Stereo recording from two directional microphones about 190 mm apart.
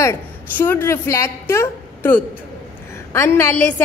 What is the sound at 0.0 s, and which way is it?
A woman's voice, 10° left (ahead or behind).